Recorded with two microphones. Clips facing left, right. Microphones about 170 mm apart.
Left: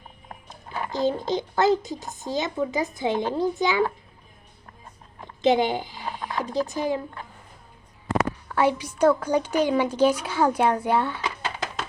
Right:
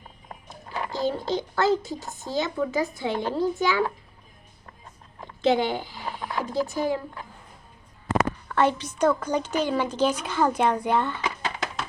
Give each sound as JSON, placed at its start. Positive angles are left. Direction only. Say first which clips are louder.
{"t": 0.4, "sound": "speech", "louder": "even", "side_deg": 20}
{"t": 5.4, "sound": "speech", "louder": "left 2 dB", "side_deg": 15}
{"t": 8.4, "sound": "speech", "louder": "even", "side_deg": 10}